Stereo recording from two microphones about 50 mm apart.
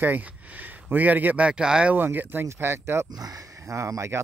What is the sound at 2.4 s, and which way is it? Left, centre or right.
Speech, right.